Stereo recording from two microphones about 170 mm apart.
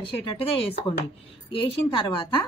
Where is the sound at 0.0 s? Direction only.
35° left (ahead or behind).